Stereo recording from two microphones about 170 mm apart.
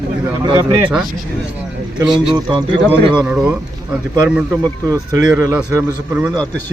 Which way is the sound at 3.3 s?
5° right (ahead or behind).